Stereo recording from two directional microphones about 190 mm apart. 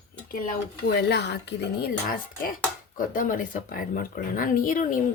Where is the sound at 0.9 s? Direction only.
60° left (ahead or behind).